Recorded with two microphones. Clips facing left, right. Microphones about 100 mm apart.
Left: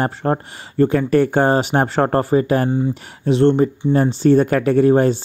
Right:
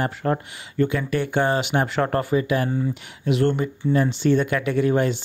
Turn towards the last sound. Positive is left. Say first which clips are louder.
# left 7 dB
turn(degrees=35)  # may be behind; listen again after turning